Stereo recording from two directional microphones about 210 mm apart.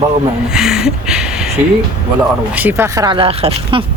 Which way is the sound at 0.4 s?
5° right (ahead or behind).